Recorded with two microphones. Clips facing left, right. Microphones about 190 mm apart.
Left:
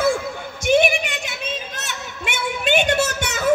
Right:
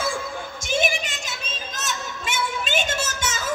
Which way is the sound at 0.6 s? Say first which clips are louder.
Left 8 dB; 60° left (ahead or behind).